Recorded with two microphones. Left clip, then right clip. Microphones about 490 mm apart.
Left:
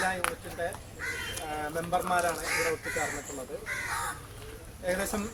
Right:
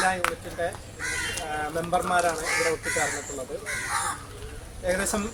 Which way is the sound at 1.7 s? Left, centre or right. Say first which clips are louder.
Right 4 dB; left.